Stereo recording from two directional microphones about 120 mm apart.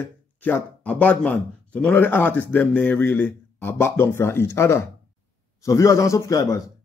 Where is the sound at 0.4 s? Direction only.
10° left (ahead or behind).